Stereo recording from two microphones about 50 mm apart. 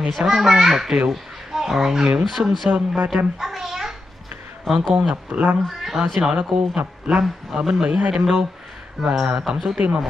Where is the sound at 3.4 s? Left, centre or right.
Centre.